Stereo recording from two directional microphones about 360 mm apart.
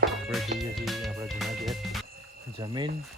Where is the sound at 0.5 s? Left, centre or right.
Centre.